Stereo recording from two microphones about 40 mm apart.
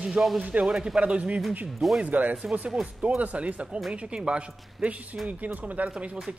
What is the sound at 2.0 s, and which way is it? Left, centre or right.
Speech, right.